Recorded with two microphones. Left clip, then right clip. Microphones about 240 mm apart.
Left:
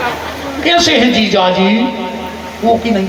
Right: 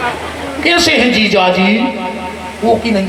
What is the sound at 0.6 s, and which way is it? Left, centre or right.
A man's voice, right.